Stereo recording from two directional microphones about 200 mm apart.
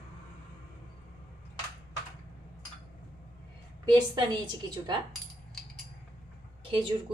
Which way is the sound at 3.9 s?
20° right (ahead or behind).